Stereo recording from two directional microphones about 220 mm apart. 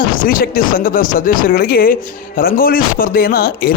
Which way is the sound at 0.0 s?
40° left (ahead or behind).